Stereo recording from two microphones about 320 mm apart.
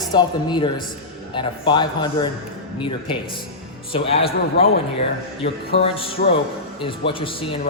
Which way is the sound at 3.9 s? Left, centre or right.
Centre.